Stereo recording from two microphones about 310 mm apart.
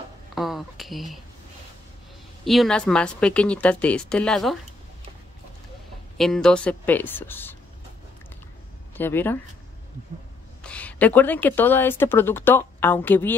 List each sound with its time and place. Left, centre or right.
0.3 s a sound: centre
2.4 s speech: centre
6.1 s speech: centre
8.9 s speech: centre
10.6 s a woman's voice: centre